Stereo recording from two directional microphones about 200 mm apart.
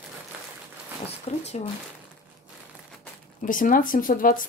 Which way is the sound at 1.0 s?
30° left (ahead or behind).